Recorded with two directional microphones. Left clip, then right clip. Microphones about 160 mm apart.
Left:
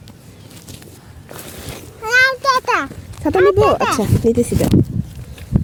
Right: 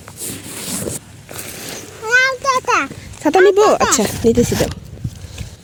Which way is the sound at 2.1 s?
20° left (ahead or behind).